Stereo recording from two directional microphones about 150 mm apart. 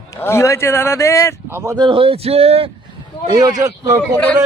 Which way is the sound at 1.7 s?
35° right (ahead or behind).